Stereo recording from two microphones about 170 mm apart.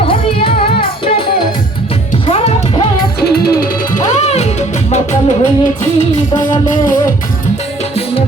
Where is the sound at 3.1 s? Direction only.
65° left (ahead or behind).